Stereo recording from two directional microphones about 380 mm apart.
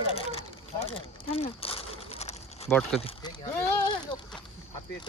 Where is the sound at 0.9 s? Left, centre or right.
Centre.